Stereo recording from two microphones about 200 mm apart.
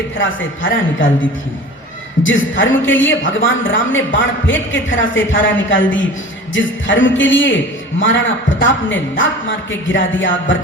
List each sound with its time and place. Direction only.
0.2 s a man's voice: 70° left (ahead or behind)